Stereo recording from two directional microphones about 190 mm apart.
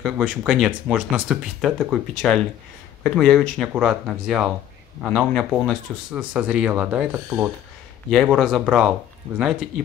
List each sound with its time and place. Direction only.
0.0 s speech: 5° right (ahead or behind)